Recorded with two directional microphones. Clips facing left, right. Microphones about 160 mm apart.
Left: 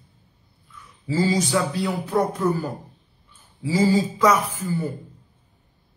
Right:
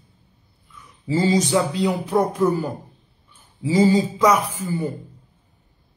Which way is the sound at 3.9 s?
15° right (ahead or behind).